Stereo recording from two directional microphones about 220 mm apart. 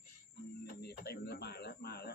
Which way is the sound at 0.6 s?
45° left (ahead or behind).